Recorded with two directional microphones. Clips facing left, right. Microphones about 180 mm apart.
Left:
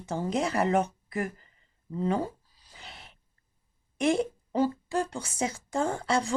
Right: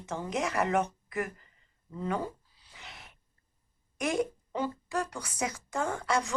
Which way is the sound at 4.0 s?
30° left (ahead or behind).